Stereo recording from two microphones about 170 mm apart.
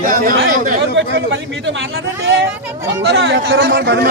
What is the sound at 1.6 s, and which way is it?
A man's voice, 90° right.